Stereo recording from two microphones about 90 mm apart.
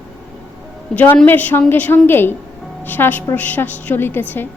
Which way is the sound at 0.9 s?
20° left (ahead or behind).